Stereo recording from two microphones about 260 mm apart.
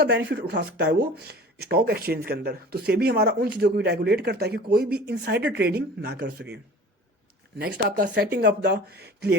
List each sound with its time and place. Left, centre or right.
0.0 s speech: right
7.6 s speech: right